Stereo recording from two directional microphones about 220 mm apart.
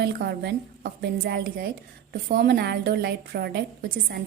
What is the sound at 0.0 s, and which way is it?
A woman's voice, 50° right (ahead or behind).